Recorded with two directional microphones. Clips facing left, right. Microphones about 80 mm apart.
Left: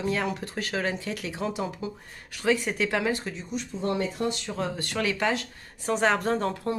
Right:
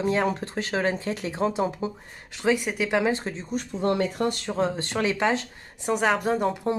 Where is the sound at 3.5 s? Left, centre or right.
Right.